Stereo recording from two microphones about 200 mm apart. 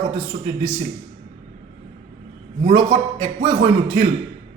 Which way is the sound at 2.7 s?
35° right (ahead or behind).